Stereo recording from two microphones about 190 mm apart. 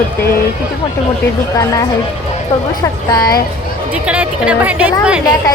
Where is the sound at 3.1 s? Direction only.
20° left (ahead or behind).